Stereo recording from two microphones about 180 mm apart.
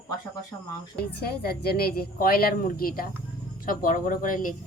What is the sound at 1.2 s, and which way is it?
A woman's voice, 60° left (ahead or behind).